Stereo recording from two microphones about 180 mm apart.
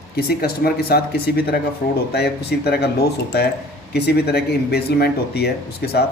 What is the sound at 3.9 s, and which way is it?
Speech, 65° left (ahead or behind).